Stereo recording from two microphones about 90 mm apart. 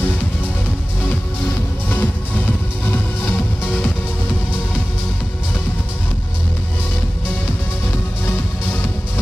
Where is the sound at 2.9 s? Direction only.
20° left (ahead or behind).